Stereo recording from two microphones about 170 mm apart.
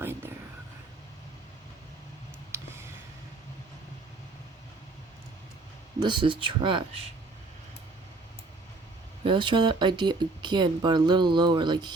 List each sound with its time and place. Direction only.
0.0 s a sound: 15° right (ahead or behind)
6.0 s speech: 25° right (ahead or behind)
9.2 s speech: 30° right (ahead or behind)